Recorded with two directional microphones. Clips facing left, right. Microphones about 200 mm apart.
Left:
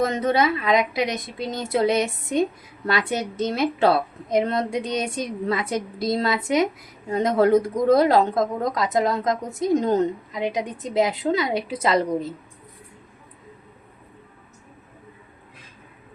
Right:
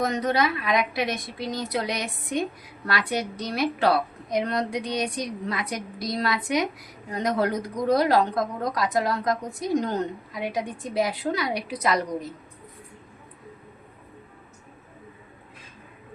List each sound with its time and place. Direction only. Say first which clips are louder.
0.0 s speech: left 3 dB; 25° left (ahead or behind)